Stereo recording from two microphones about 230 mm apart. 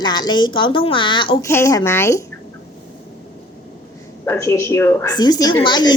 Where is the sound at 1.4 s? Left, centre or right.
Centre.